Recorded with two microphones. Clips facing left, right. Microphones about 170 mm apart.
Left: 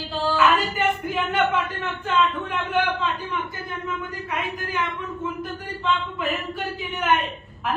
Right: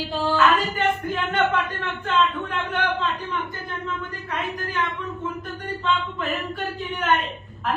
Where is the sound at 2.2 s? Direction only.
5° left (ahead or behind).